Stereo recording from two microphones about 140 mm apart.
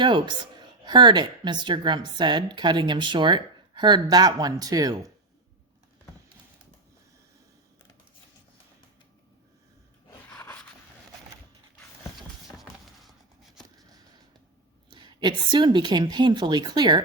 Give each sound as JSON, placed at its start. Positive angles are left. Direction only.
{"t": 0.0, "sound": "a woman's voice", "side_deg": -35}
{"t": 10.3, "sound": "a sound", "side_deg": 10}
{"t": 14.8, "sound": "a woman's voice", "side_deg": -35}